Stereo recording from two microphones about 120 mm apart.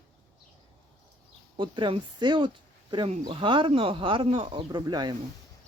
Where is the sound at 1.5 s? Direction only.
45° right (ahead or behind).